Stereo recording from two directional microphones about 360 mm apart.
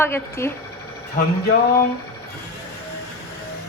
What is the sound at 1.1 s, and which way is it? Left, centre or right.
Speech, left.